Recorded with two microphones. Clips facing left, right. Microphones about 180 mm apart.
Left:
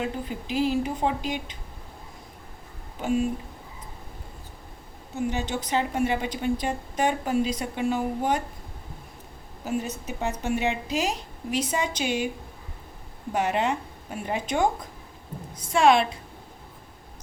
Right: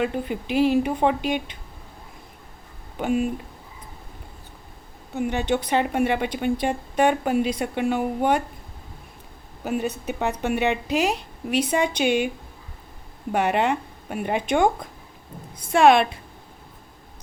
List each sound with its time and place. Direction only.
0.0 s a woman's voice: 65° right (ahead or behind)
3.0 s a woman's voice: 60° right (ahead or behind)
5.1 s a woman's voice: 60° right (ahead or behind)
9.6 s a woman's voice: 60° right (ahead or behind)
13.3 s a woman's voice: 60° right (ahead or behind)